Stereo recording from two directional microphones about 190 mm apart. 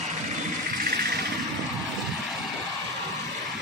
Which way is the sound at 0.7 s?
45° right (ahead or behind).